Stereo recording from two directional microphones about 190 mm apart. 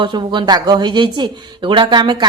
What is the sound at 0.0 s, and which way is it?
Speech, 25° right (ahead or behind).